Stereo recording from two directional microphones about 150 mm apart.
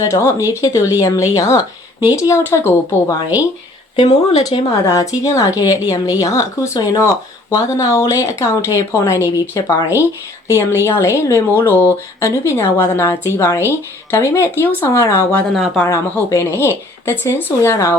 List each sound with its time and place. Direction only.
0.0 s speech: 20° left (ahead or behind)
3.9 s speech: 40° left (ahead or behind)
4.4 s speech: 25° left (ahead or behind)
15.5 s speech: centre (ahead or behind)
15.8 s speech: 20° left (ahead or behind)